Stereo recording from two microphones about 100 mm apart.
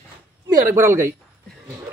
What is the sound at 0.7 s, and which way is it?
Speech, 25° right (ahead or behind).